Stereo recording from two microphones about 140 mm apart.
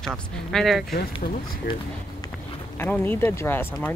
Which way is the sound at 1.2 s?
85° left.